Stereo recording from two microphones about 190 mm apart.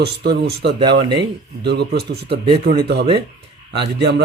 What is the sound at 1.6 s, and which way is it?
Speech, 60° right (ahead or behind).